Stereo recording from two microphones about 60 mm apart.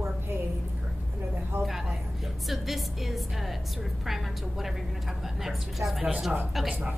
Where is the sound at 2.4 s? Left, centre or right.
Centre.